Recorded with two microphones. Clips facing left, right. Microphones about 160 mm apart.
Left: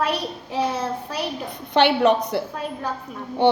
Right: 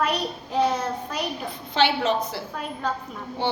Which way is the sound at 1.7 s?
65° left (ahead or behind).